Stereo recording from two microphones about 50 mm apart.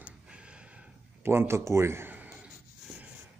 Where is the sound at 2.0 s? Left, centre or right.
Right.